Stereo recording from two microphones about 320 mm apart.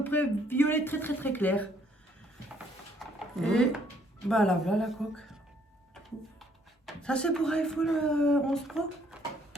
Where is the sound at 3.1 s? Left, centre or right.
Centre.